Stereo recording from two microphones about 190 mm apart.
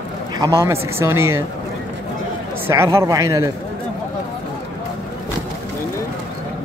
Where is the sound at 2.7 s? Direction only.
15° right (ahead or behind).